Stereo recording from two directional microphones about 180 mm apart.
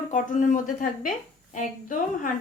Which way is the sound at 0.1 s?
45° left (ahead or behind).